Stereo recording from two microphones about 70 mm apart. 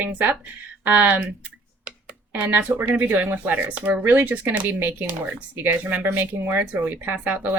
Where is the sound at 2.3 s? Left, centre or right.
Right.